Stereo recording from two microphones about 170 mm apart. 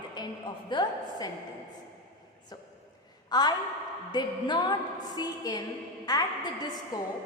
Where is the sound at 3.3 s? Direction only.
25° left (ahead or behind).